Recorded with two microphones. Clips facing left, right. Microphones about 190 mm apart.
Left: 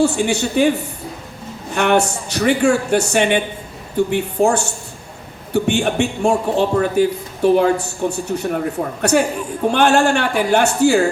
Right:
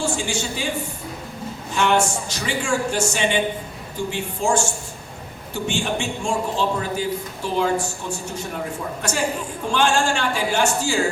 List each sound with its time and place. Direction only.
0.0 s a man's voice: 65° left (ahead or behind)
1.7 s a man's voice: 60° left (ahead or behind)